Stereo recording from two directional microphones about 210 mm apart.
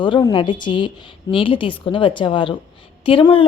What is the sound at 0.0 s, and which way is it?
Speech, 20° left (ahead or behind).